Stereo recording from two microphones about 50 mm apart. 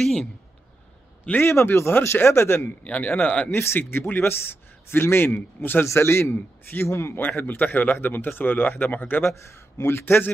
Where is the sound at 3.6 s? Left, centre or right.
Left.